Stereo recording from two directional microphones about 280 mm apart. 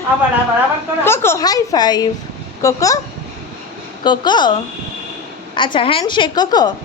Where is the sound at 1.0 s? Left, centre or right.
Centre.